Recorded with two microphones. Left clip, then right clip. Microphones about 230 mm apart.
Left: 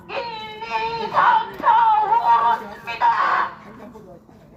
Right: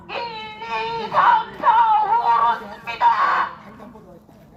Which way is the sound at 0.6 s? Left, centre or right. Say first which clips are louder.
Left 1 dB; right.